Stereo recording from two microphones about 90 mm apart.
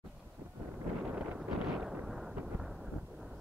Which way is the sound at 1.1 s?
20° right (ahead or behind).